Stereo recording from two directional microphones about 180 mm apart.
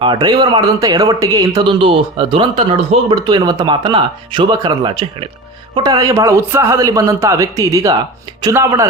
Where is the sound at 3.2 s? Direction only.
20° right (ahead or behind).